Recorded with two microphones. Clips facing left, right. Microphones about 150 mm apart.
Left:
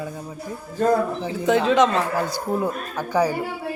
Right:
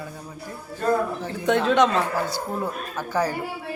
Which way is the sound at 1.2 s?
5° left (ahead or behind).